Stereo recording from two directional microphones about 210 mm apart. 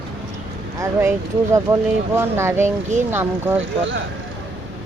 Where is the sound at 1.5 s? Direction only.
15° right (ahead or behind).